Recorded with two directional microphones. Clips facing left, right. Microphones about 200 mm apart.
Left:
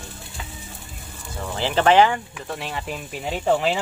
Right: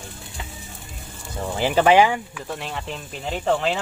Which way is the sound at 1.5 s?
10° right (ahead or behind).